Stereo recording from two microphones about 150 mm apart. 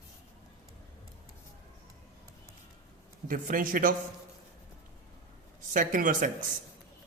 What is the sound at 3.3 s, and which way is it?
Speech, 65° right (ahead or behind).